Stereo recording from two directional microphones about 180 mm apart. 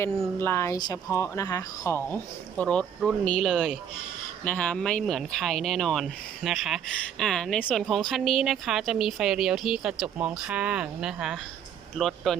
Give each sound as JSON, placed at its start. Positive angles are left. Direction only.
{"t": 0.3, "sound": "speech", "side_deg": 15}